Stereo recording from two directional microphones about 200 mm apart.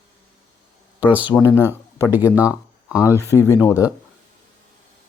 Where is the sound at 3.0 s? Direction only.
15° left (ahead or behind).